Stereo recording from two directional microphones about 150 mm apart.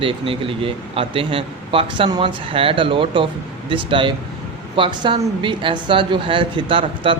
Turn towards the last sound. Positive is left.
turn(degrees=-35)  # may be behind; listen again after turning